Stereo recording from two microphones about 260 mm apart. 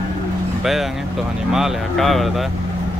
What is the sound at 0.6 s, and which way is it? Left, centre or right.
Speech, centre.